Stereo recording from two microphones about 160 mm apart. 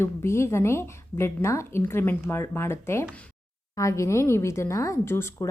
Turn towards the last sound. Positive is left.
turn(degrees=15)  # may be behind; listen again after turning